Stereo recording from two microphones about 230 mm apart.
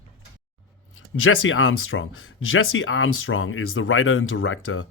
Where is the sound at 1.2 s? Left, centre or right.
Left.